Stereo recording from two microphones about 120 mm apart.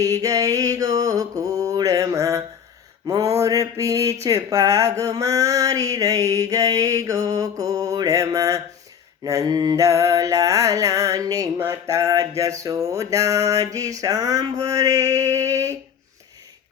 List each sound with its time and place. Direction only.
0.0 s mantra: 30° right (ahead or behind)
3.1 s speech: 30° right (ahead or behind)